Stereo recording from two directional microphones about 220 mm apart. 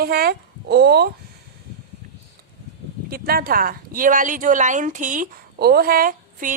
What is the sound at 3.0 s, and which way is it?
A woman's voice, 45° right (ahead or behind).